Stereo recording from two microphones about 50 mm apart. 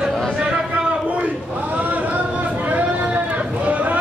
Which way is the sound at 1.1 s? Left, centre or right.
Right.